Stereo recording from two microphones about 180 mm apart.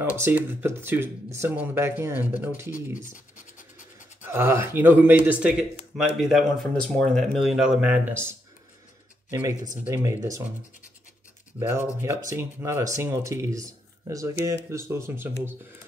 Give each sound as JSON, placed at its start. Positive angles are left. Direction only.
{"t": 0.0, "sound": "speech", "side_deg": -10}
{"t": 3.5, "sound": "scratch", "side_deg": 45}
{"t": 4.2, "sound": "speech", "side_deg": -15}
{"t": 12.0, "sound": "speech", "side_deg": -15}